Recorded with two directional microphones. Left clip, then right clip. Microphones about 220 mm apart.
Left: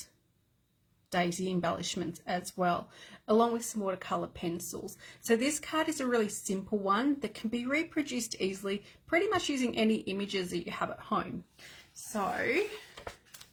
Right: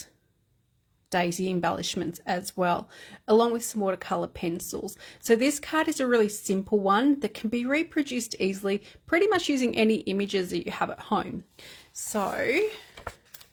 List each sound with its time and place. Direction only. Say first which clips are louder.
1.1 s a woman's voice: right 5 dB; 40° right (ahead or behind)